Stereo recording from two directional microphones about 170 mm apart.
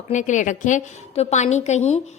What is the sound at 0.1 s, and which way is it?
A woman's voice, 45° left (ahead or behind).